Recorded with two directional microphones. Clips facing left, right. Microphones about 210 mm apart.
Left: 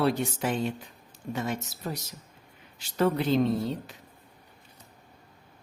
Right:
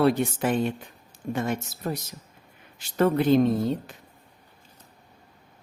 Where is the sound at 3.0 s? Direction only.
55° right (ahead or behind).